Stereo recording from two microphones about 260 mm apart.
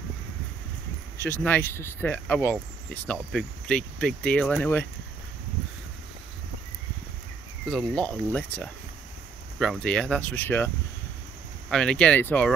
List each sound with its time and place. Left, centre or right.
1.1 s speech: centre
7.6 s speech: centre
11.7 s speech: centre